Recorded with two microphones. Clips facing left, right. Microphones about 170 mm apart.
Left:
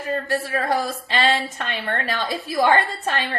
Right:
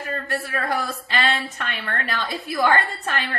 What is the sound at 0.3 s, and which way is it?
A woman's voice, 25° left (ahead or behind).